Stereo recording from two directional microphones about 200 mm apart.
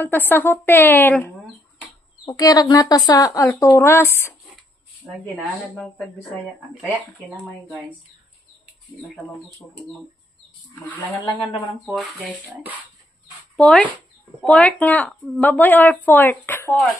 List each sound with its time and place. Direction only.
0.0 s a woman's voice: 10° left (ahead or behind)
11.8 s a woman's voice: centre (ahead or behind)